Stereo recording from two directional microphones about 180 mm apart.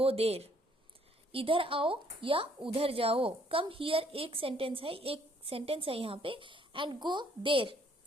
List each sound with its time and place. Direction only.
0.0 s a woman's voice: 35° right (ahead or behind)